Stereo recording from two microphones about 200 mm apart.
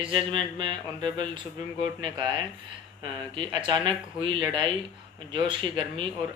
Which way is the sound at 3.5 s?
20° right (ahead or behind).